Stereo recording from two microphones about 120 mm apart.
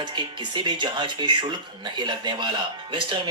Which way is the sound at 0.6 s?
40° right (ahead or behind).